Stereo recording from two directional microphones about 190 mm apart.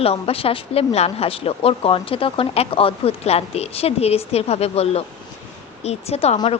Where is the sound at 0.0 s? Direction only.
30° left (ahead or behind).